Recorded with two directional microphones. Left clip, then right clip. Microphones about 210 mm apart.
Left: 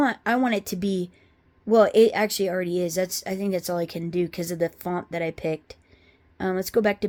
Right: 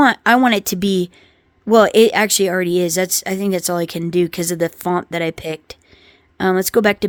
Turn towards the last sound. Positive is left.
turn(degrees=-40)  # may be behind; listen again after turning